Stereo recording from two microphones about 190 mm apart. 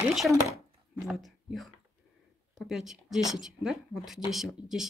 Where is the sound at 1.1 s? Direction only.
Centre (ahead or behind).